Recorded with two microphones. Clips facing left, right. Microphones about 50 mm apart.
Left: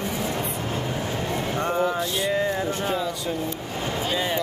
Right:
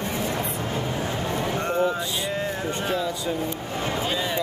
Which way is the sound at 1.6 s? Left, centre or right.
Left.